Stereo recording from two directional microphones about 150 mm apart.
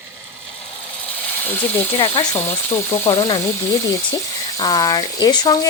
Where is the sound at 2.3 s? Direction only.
20° left (ahead or behind).